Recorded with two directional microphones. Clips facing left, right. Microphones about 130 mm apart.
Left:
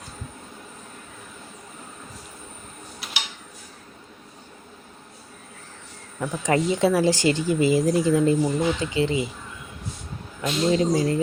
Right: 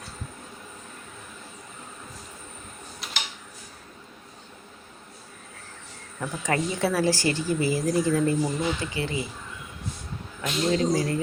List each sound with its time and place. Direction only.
3.0 s tick-tock: 5° left (ahead or behind)
6.1 s speech: 20° left (ahead or behind)
10.4 s speech: 25° left (ahead or behind)